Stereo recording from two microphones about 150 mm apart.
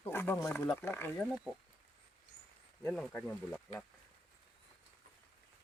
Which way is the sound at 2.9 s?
5° left (ahead or behind).